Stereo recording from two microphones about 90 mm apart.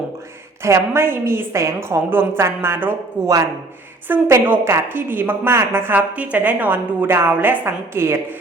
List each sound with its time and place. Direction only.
0.6 s a woman's voice: 30° right (ahead or behind)